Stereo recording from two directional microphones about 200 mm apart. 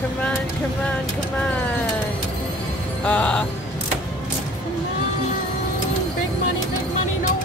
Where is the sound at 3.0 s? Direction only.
5° left (ahead or behind).